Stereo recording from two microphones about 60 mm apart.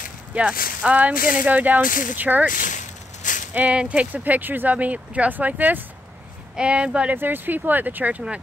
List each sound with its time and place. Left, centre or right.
0.3 s speech: right
3.5 s speech: right
6.5 s speech: centre
7.2 s speech: right